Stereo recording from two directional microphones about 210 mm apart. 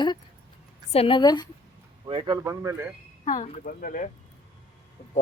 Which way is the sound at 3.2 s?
30° left (ahead or behind).